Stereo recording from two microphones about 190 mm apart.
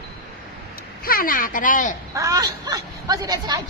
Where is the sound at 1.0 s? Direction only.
50° left (ahead or behind).